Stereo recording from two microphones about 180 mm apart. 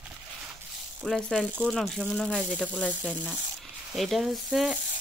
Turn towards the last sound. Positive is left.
turn(degrees=0)  # may be behind; listen again after turning